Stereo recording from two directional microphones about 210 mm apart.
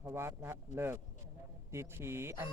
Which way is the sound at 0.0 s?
10° right (ahead or behind).